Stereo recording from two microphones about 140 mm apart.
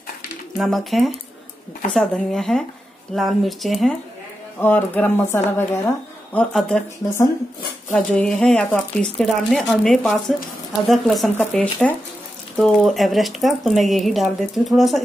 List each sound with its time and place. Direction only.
0.6 s speech: centre (ahead or behind)
4.6 s speech: 15° left (ahead or behind)
7.0 s speech: 20° left (ahead or behind)
7.9 s speech: 5° left (ahead or behind)